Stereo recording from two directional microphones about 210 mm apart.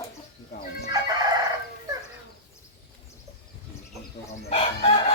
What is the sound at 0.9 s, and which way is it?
Crowing, 15° right (ahead or behind).